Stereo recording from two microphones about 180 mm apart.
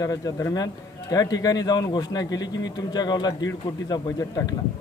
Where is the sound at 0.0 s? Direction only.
20° left (ahead or behind).